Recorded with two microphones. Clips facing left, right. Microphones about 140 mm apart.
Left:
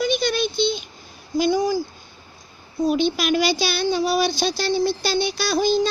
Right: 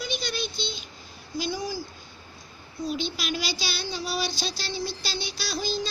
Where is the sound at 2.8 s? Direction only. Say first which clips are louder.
Left 10 dB; 60° left (ahead or behind).